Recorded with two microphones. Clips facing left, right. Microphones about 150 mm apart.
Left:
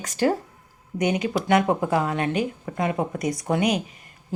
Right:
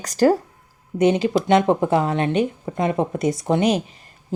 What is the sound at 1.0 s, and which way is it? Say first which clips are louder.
Speech: right 6 dB; 30° right (ahead or behind).